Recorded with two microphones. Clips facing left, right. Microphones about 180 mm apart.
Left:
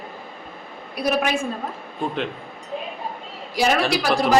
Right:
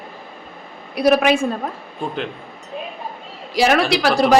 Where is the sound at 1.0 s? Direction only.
75° right (ahead or behind).